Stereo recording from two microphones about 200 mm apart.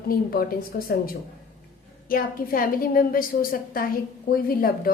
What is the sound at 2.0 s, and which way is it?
A woman's voice, 45° left (ahead or behind).